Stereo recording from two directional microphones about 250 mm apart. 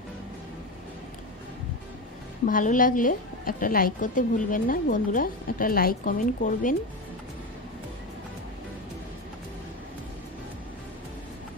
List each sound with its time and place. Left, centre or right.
2.4 s a woman's voice: left